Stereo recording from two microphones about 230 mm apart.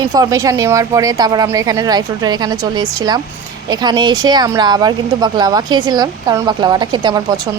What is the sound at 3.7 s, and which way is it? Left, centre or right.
A woman's voice, centre.